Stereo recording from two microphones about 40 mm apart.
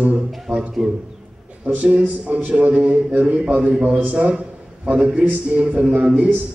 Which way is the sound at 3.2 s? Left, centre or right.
Right.